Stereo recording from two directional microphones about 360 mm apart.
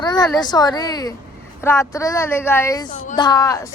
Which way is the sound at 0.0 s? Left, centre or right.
Centre.